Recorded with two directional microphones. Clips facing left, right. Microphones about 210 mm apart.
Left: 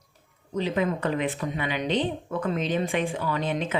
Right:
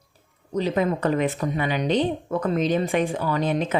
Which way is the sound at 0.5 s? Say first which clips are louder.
Right 3 dB; 40° right (ahead or behind).